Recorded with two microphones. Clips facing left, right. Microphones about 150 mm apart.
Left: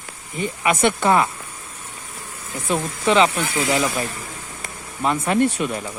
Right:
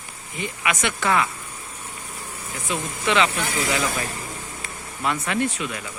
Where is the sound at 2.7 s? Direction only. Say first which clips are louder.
Left 5 dB; 40° left (ahead or behind).